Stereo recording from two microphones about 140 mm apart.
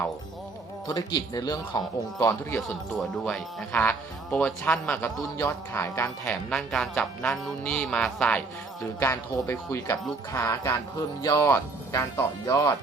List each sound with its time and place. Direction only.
0.9 s speech: 30° left (ahead or behind)
2.6 s speech: 5° left (ahead or behind)
9.0 s speech: 20° left (ahead or behind)